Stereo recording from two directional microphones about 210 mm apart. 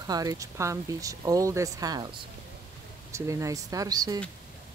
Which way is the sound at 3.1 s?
15° right (ahead or behind).